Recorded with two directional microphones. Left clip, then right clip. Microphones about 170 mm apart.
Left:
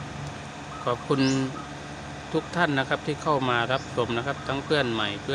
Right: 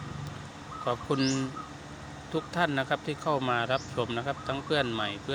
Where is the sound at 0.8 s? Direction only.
20° right (ahead or behind).